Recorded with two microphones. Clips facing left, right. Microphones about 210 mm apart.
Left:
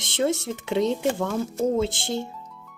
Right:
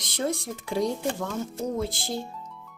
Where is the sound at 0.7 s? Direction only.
25° left (ahead or behind).